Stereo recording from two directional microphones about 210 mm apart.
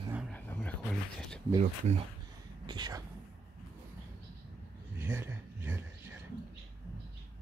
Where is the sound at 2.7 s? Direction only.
20° right (ahead or behind).